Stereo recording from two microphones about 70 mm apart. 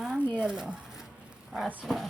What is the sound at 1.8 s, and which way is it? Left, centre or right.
Dog, centre.